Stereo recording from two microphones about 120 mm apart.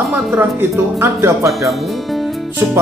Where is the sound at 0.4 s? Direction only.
20° right (ahead or behind).